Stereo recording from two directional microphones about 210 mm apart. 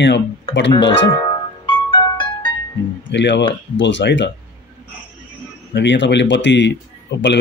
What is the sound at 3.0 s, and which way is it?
A man's voice, 55° left (ahead or behind).